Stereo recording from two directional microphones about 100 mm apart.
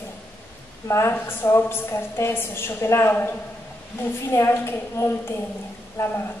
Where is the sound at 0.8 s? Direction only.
30° left (ahead or behind).